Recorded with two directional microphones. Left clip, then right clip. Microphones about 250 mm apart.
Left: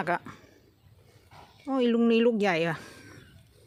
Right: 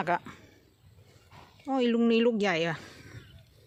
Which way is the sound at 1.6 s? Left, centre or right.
Centre.